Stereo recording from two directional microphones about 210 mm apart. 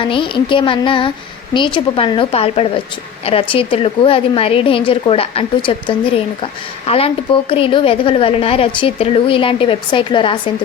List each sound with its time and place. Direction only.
0.0 s a woman's voice: 25° left (ahead or behind)